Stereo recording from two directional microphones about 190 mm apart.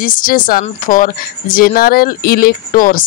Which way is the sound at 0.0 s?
45° left (ahead or behind).